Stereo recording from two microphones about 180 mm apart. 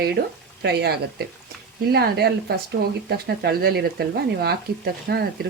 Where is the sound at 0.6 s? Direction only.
65° right (ahead or behind).